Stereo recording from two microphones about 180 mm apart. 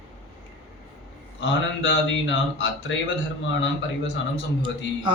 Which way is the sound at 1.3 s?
90° left.